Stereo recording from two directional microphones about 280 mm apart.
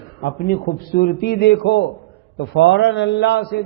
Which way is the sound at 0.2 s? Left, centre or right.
Left.